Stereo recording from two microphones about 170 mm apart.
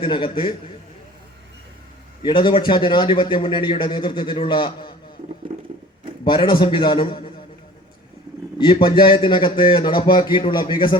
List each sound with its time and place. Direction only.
0.0 s speech: 30° left (ahead or behind)
2.2 s speech: 30° left (ahead or behind)
5.5 s a sound: 40° right (ahead or behind)
6.2 s speech: 30° left (ahead or behind)
8.5 s speech: 30° left (ahead or behind)